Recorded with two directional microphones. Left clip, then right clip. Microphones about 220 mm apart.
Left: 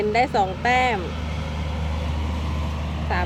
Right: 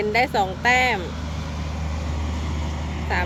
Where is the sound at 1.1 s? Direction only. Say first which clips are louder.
Left 1 dB; 25° left (ahead or behind); by 3.0 s 40° left (ahead or behind).